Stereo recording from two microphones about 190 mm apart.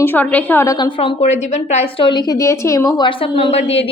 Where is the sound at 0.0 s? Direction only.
10° left (ahead or behind).